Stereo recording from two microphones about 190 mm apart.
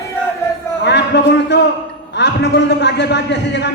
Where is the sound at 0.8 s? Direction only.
60° left (ahead or behind).